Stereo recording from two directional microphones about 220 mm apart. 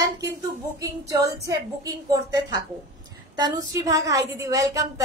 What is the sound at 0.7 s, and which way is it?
A woman's voice, 15° right (ahead or behind).